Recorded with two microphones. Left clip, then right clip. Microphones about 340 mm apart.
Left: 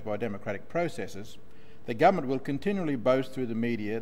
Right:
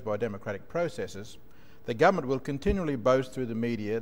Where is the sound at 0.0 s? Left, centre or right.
Right.